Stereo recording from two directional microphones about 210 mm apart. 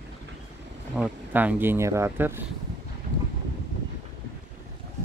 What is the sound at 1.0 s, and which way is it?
Speech, 10° right (ahead or behind).